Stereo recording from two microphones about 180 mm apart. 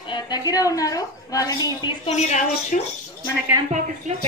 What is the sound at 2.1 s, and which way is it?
Speech, 40° left (ahead or behind).